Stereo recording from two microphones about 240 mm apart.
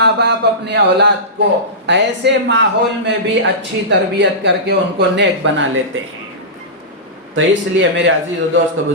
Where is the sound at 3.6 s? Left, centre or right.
Right.